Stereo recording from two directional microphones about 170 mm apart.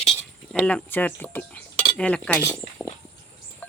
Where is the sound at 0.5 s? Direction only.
10° left (ahead or behind).